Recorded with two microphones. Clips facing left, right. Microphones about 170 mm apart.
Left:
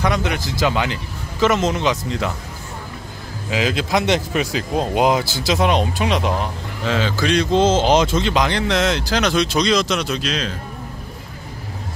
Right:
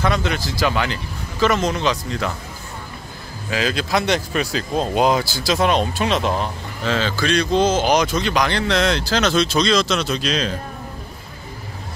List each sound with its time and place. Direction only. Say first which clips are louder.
0.0 s speech: even; 15° left (ahead or behind)
3.4 s speech: left 1 dB; 20° left (ahead or behind)
10.1 s a man's voice: right 2 dB; 5° left (ahead or behind)